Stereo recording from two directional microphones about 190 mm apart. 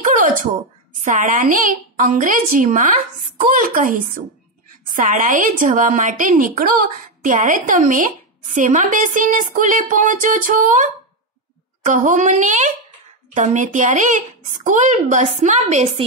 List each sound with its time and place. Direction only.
1.0 s a woman's voice: 45° right (ahead or behind)